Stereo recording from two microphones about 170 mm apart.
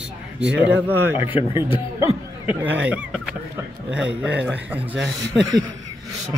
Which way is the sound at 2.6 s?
10° right (ahead or behind).